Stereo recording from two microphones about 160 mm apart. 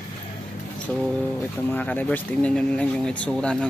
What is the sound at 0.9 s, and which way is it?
Speech, 5° left (ahead or behind).